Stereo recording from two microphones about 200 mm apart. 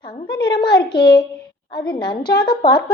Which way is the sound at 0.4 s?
20° left (ahead or behind).